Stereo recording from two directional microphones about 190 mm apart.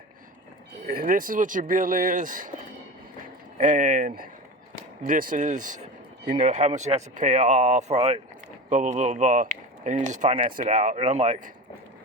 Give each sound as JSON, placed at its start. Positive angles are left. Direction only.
{"t": 0.9, "sound": "speech", "side_deg": -50}
{"t": 3.6, "sound": "speech", "side_deg": -45}